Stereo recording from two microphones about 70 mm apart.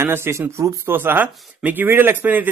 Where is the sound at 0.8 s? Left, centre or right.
Right.